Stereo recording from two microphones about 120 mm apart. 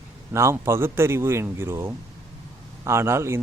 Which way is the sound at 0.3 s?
25° right (ahead or behind).